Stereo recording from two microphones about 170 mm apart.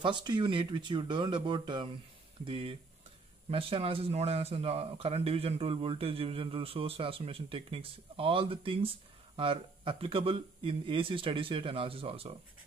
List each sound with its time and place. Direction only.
0.0 s speech: 25° right (ahead or behind)